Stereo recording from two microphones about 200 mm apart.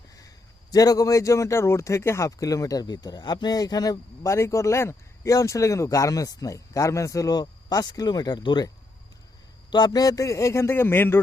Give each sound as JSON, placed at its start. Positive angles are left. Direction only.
{"t": 0.7, "sound": "speech", "side_deg": 20}